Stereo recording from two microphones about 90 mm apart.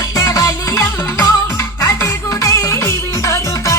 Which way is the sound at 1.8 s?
30° left (ahead or behind).